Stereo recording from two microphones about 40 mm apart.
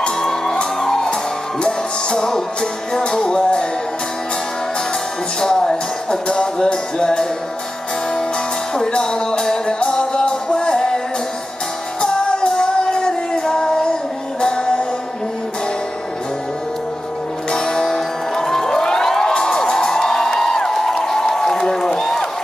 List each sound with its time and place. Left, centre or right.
0.2 s music: centre
5.4 s music: centre
8.7 s music: centre
12.0 s music: centre
17.5 s music: centre